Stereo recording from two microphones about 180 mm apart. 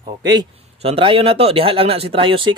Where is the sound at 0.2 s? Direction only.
20° right (ahead or behind).